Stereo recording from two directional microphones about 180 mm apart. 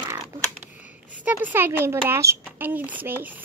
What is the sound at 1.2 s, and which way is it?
Speech, 10° right (ahead or behind).